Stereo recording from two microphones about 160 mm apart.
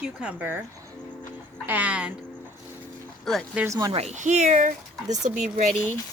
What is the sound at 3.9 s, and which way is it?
Speech, 45° right (ahead or behind).